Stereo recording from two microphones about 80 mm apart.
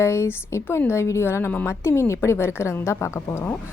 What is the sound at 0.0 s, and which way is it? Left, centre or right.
A woman's voice, left.